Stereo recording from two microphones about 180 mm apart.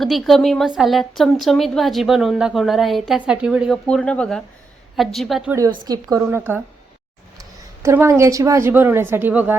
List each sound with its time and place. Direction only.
0.0 s a woman's voice: centre (ahead or behind)
5.5 s a woman's voice: 20° right (ahead or behind)